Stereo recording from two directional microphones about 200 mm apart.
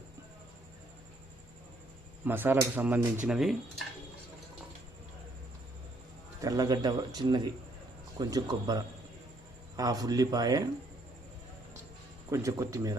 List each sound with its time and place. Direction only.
2.2 s speech: 10° right (ahead or behind)
6.4 s a man's voice: 20° right (ahead or behind)
12.3 s speech: 15° right (ahead or behind)